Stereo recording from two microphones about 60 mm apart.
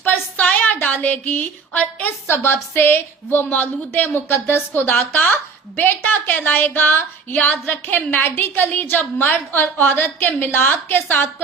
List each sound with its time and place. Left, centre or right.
0.0 s a sound: left
1.7 s a woman's voice: centre
2.2 s a woman's voice: left